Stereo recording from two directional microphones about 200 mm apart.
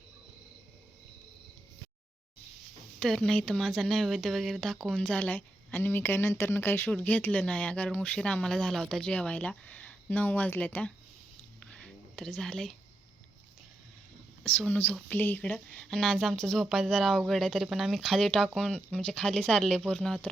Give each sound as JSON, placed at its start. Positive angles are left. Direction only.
{"t": 3.0, "sound": "speech", "side_deg": 5}
{"t": 11.6, "sound": "a sound", "side_deg": 5}
{"t": 14.4, "sound": "a woman's voice", "side_deg": 5}